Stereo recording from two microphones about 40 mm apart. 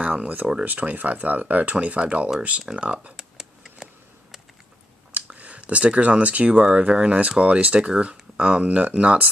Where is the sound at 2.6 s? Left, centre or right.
Centre.